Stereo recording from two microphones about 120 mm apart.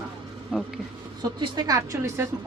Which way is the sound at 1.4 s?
35° right (ahead or behind).